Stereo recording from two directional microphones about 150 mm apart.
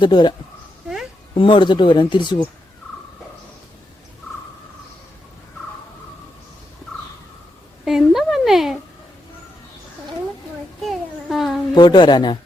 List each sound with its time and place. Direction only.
0.0 s speech: 30° left (ahead or behind)
7.9 s speech: centre (ahead or behind)
10.8 s a sound: centre (ahead or behind)
11.7 s speech: 30° left (ahead or behind)